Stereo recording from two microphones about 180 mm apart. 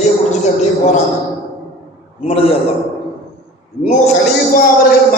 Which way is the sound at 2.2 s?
30° left (ahead or behind).